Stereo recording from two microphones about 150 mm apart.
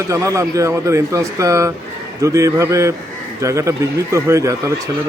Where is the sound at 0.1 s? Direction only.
20° right (ahead or behind).